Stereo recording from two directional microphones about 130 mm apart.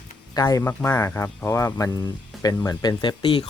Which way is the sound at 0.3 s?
30° left (ahead or behind).